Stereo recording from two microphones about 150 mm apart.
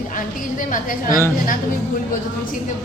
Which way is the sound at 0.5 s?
65° left (ahead or behind).